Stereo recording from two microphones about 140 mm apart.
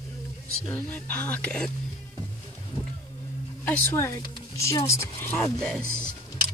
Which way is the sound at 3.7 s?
15° left (ahead or behind).